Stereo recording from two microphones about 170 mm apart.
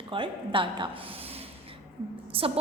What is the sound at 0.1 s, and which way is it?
Speech, 30° right (ahead or behind).